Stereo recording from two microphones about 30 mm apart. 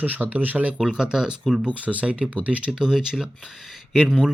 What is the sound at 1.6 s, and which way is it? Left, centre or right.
Speech, right.